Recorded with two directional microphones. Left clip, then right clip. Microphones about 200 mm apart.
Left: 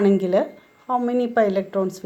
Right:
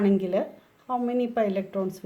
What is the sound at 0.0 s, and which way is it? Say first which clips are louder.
Speech: left 6 dB; 20° left (ahead or behind).